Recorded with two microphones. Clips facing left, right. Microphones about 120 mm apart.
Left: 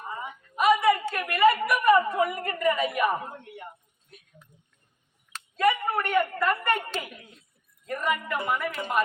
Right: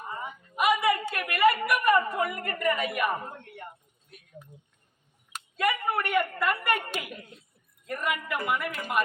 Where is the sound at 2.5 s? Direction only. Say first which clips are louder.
Left 3 dB; 20° left (ahead or behind).